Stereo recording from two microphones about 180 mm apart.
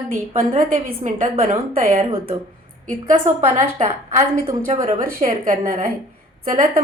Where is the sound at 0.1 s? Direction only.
50° right (ahead or behind).